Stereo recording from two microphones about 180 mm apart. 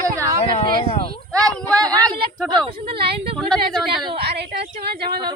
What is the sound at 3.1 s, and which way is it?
Speech, 30° right (ahead or behind).